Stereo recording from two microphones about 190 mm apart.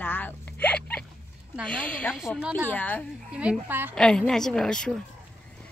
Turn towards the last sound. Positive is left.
turn(degrees=5)  # may be behind; listen again after turning